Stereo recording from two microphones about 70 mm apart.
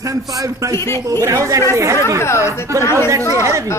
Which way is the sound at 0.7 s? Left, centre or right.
Left.